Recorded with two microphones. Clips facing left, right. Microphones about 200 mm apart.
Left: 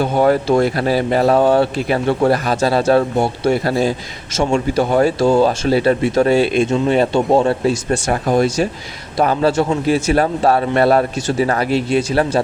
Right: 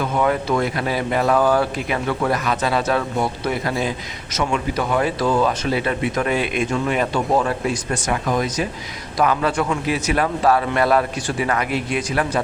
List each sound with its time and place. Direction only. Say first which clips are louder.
0.0 s a man's voice: left 6 dB; 30° left (ahead or behind)